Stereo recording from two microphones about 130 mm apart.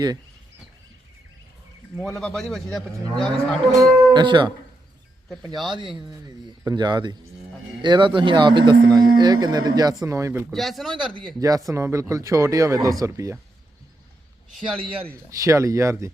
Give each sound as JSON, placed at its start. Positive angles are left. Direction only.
{"t": 2.0, "sound": "a man's voice", "side_deg": 5}
{"t": 3.7, "sound": "cattle", "side_deg": -30}
{"t": 5.6, "sound": "cattle", "side_deg": -35}
{"t": 10.0, "sound": "speech", "side_deg": -25}
{"t": 10.5, "sound": "a man's voice", "side_deg": 0}
{"t": 11.3, "sound": "speech", "side_deg": -25}
{"t": 15.1, "sound": "speech", "side_deg": -25}